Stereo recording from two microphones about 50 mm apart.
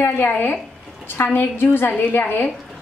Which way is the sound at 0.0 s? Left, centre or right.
Left.